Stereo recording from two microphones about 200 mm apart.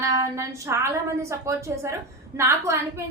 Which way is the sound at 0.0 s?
15° right (ahead or behind).